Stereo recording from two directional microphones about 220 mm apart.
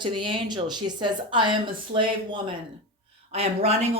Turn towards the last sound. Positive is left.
turn(degrees=-25)  # may be behind; listen again after turning